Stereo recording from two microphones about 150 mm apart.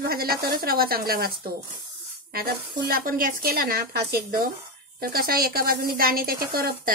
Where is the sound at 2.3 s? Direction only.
80° right.